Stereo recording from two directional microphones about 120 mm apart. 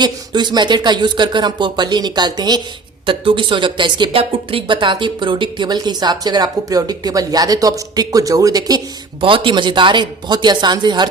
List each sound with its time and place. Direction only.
0.0 s speech: 35° right (ahead or behind)
9.2 s speech: 45° right (ahead or behind)